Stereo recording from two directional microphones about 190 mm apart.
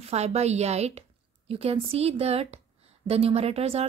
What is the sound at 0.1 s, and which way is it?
Speech, 35° right (ahead or behind).